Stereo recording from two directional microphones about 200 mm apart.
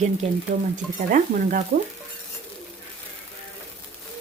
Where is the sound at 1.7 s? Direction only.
45° right (ahead or behind).